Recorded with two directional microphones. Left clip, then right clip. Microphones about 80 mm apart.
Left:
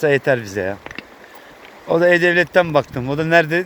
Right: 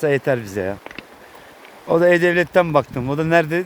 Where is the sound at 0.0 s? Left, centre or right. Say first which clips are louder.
Left 3 dB; right.